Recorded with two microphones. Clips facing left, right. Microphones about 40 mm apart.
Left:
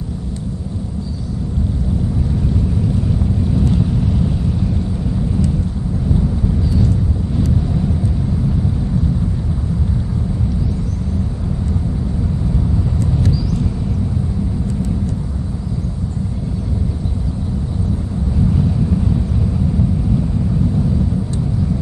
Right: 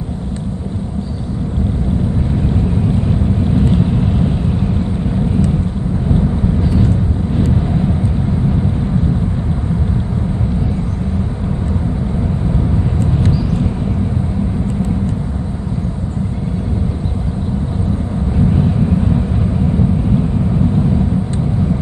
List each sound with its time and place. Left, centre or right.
2.4 s vehicle: right
13.0 s vehicle: right
18.4 s vehicle: right